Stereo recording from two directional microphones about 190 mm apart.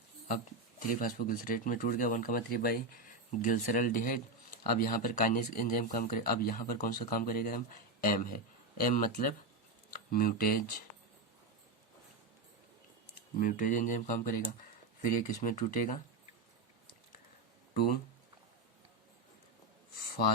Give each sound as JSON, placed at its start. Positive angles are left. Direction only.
{"t": 0.8, "sound": "speech", "side_deg": 45}
{"t": 13.4, "sound": "speech", "side_deg": 45}